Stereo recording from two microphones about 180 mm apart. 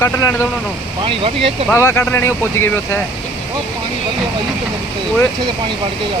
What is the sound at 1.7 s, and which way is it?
Speech, 15° left (ahead or behind).